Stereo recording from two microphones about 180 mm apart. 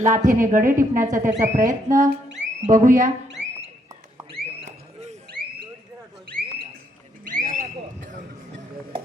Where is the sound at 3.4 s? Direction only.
5° right (ahead or behind).